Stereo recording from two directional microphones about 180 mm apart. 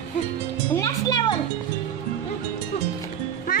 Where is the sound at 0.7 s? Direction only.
20° left (ahead or behind).